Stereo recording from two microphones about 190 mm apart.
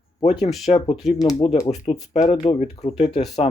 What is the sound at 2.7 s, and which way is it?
Speech, 35° left (ahead or behind).